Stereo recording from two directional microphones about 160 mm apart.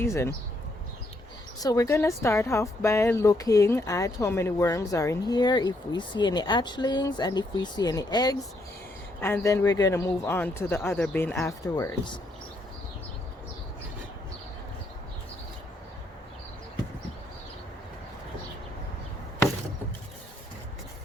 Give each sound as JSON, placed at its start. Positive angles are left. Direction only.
{"t": 0.0, "sound": "speech", "side_deg": 20}
{"t": 1.5, "sound": "a woman's voice", "side_deg": 20}